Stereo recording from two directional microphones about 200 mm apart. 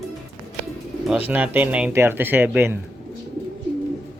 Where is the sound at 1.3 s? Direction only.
10° right (ahead or behind).